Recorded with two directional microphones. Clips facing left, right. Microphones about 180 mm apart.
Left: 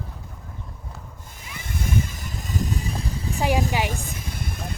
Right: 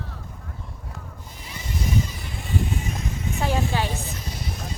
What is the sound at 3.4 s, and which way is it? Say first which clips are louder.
Speech: left 3 dB; 15° left (ahead or behind).